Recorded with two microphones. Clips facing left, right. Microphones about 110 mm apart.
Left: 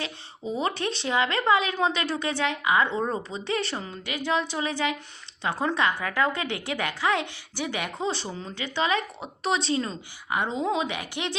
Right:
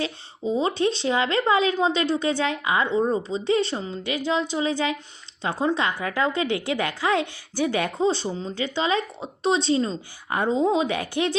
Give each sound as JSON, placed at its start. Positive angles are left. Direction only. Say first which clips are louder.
{"t": 0.0, "sound": "a woman's voice", "louder": "right 6 dB", "side_deg": -25}